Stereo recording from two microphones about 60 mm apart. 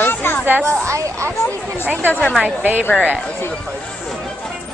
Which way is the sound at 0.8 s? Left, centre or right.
Right.